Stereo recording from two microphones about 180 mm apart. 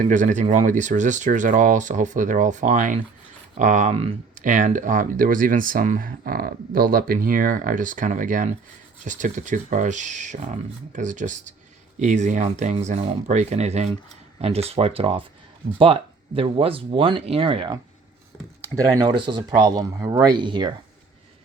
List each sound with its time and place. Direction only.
0.0 s speech: 45° right (ahead or behind)
4.4 s speech: 45° right (ahead or behind); by 17.7 s 30° right (ahead or behind)
18.9 s speech: 25° right (ahead or behind)